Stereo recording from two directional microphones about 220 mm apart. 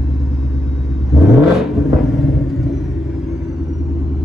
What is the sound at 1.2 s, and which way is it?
Vehicle, centre (ahead or behind).